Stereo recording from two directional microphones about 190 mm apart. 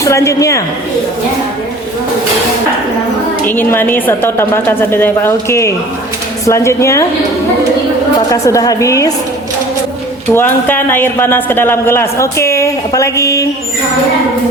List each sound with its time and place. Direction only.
0.0 s a man's voice: 15° left (ahead or behind)
3.4 s a man's voice: 10° left (ahead or behind)
8.3 s a man's voice: 15° left (ahead or behind)
10.3 s a man's voice: 10° left (ahead or behind)